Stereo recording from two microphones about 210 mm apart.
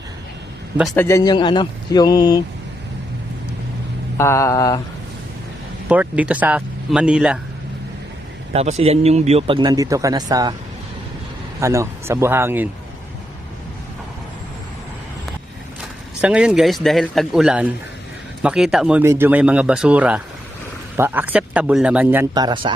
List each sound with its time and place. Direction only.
0.9 s speech: 15° left (ahead or behind)
4.2 s mantra: 15° left (ahead or behind)
5.9 s speech: 5° right (ahead or behind)
8.5 s speech: 30° right (ahead or behind)
11.6 s speech: 15° right (ahead or behind)
15.8 s speech: 5° right (ahead or behind); by 22.7 s 20° right (ahead or behind)